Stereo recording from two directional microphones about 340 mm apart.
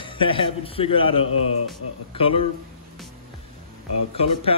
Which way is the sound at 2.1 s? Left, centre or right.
Centre.